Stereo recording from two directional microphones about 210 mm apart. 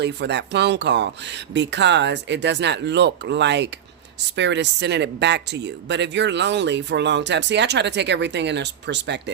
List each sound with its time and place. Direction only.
0.0 s speech: 55° right (ahead or behind)